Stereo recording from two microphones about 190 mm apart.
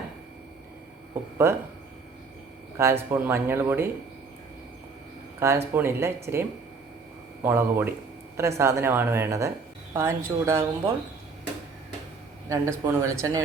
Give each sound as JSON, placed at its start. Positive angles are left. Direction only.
{"t": 1.4, "sound": "a woman's voice", "side_deg": -15}
{"t": 2.7, "sound": "a woman's voice", "side_deg": -15}
{"t": 5.4, "sound": "a woman's voice", "side_deg": -15}
{"t": 7.4, "sound": "a woman's voice", "side_deg": -10}
{"t": 12.5, "sound": "a woman's voice", "side_deg": -15}